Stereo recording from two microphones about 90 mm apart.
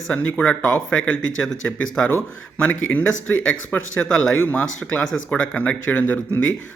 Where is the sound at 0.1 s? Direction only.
15° left (ahead or behind).